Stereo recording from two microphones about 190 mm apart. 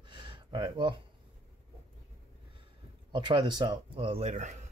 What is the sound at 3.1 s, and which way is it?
Speech, 25° right (ahead or behind).